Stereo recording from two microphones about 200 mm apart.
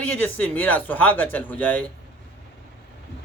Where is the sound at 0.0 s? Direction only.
10° left (ahead or behind).